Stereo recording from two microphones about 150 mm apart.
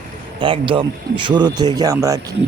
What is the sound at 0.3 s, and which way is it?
Speech, 35° right (ahead or behind).